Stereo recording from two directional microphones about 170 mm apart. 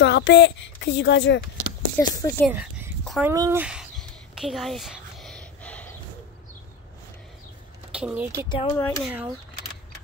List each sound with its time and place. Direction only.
0.0 s speech: 90° left
2.0 s speech: 20° left (ahead or behind)
2.5 s dog: 10° right (ahead or behind)
3.3 s speech: 15° right (ahead or behind)
4.4 s a sound: centre (ahead or behind)
7.9 s speech: 10° right (ahead or behind)
8.5 s speech: 35° left (ahead or behind)
8.7 s speech: 10° left (ahead or behind)
9.0 s speech: 5° right (ahead or behind)